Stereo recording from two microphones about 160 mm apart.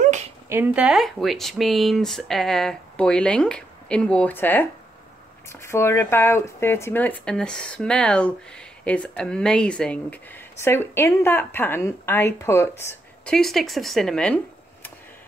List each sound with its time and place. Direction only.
0.5 s speech: 10° right (ahead or behind); by 13.3 s 15° left (ahead or behind)
13.3 s speech: centre (ahead or behind)